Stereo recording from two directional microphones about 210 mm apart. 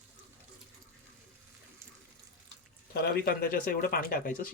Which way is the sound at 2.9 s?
50° left (ahead or behind).